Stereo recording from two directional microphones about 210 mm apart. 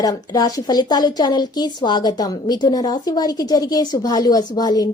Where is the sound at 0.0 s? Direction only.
20° left (ahead or behind).